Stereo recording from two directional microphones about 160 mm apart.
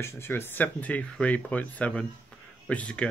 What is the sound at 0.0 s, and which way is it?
Mantra, 15° left (ahead or behind).